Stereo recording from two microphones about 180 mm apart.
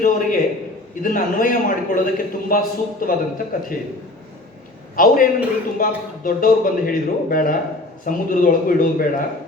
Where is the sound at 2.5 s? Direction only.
50° left (ahead or behind).